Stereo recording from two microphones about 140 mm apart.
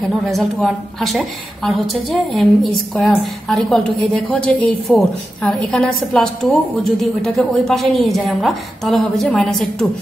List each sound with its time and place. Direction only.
0.3 s a woman's voice: centre (ahead or behind)